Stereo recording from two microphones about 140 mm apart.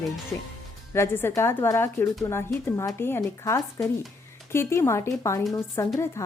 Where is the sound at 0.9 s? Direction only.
15° left (ahead or behind).